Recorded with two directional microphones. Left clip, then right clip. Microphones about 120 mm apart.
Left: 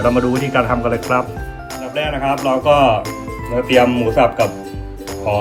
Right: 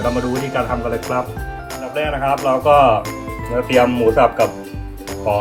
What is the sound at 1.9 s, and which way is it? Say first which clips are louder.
Music: even; 55° right (ahead or behind).